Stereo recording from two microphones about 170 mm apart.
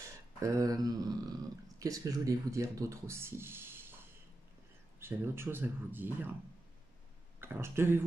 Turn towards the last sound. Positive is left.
turn(degrees=-15)  # may be behind; listen again after turning